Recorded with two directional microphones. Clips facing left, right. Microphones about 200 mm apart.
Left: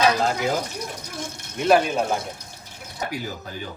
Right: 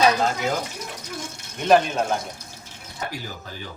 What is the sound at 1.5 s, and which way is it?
Speech, 5° left (ahead or behind).